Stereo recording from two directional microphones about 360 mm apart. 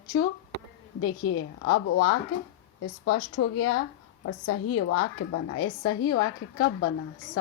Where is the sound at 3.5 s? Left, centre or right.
Left.